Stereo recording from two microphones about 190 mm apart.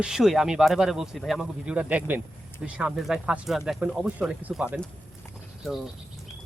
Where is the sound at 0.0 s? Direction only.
5° right (ahead or behind).